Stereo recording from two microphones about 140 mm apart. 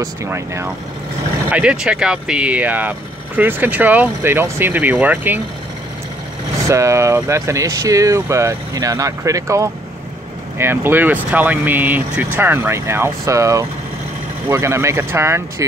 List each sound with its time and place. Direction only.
0.0 s speech: 20° right (ahead or behind)
1.5 s speech: 10° right (ahead or behind)
6.7 s speech: 20° right (ahead or behind)